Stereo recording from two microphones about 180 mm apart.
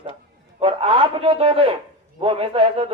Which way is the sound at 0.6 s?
30° right (ahead or behind).